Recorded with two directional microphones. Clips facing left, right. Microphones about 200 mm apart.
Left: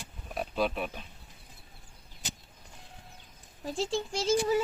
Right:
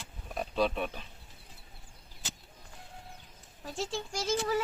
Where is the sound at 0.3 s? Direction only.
5° left (ahead or behind).